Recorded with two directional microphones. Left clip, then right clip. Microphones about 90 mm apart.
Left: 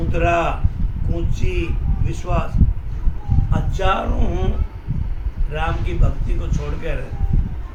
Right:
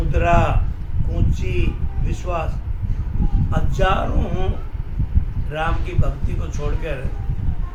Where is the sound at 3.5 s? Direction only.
20° right (ahead or behind).